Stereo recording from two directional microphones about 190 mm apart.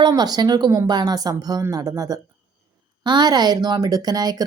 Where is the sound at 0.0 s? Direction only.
20° right (ahead or behind).